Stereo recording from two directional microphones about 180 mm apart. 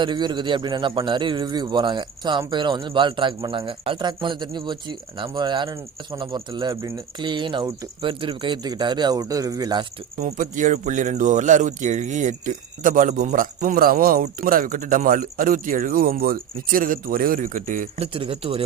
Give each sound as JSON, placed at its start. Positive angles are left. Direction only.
{"t": 0.0, "sound": "a man's voice", "side_deg": -25}
{"t": 10.2, "sound": "speech", "side_deg": -45}